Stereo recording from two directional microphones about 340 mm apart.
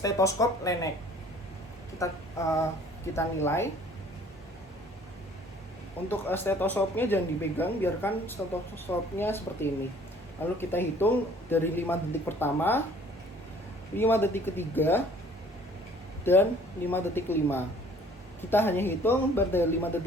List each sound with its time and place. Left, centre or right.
0.0 s speech: centre
2.0 s a sound: centre
3.2 s speech: centre
6.1 s speech: centre
13.9 s speech: centre
16.2 s speech: centre